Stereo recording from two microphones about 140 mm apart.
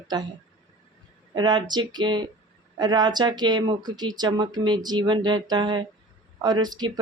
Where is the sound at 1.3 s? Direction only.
30° right (ahead or behind).